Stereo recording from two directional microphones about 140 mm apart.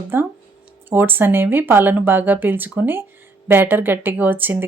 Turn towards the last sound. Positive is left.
turn(degrees=-15)  # may be behind; listen again after turning